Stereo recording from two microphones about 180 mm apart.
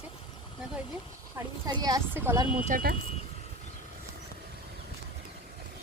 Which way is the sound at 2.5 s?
45° right (ahead or behind).